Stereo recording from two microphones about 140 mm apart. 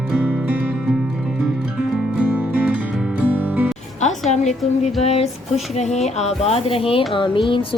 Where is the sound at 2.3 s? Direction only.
10° right (ahead or behind).